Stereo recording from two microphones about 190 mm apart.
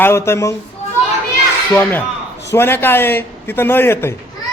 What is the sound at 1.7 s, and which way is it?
A man's voice, 10° left (ahead or behind).